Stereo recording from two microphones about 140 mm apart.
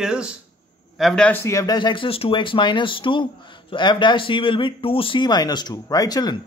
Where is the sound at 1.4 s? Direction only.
25° left (ahead or behind).